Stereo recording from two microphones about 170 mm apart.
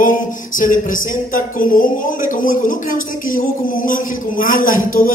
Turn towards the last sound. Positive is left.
turn(degrees=55)  # may be behind; listen again after turning